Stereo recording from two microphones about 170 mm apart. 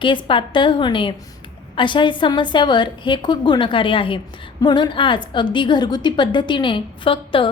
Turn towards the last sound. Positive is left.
turn(degrees=30)  # may be behind; listen again after turning